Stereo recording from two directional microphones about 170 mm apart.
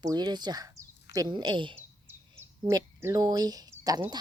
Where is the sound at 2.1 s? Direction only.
20° right (ahead or behind).